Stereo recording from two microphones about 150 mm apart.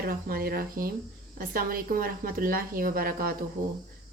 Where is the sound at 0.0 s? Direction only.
80° right.